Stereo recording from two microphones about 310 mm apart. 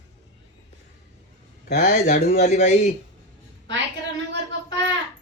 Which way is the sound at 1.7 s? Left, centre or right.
Left.